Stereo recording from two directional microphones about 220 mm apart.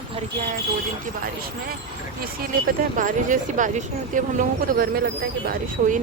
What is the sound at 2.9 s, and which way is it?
Speech, 35° right (ahead or behind).